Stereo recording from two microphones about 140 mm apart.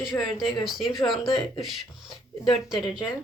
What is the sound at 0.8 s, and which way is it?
Speech, 25° left (ahead or behind).